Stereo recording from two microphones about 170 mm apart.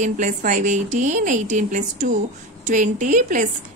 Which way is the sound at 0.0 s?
45° right (ahead or behind).